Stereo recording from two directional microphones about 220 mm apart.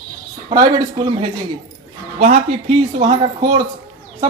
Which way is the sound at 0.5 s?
20° right (ahead or behind).